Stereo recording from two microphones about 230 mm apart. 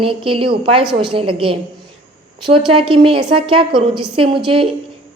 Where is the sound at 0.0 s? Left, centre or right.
Right.